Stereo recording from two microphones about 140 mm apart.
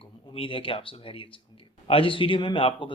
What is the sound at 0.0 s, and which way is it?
Speech, 40° left (ahead or behind).